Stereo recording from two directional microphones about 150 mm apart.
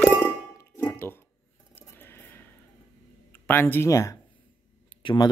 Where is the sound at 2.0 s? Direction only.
15° left (ahead or behind).